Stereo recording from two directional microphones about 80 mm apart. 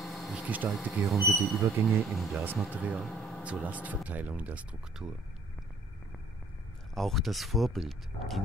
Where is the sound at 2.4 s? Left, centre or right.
Centre.